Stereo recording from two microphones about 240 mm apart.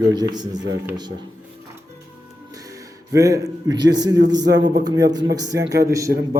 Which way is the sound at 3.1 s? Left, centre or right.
Centre.